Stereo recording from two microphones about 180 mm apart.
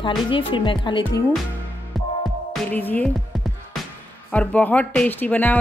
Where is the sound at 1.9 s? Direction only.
Centre (ahead or behind).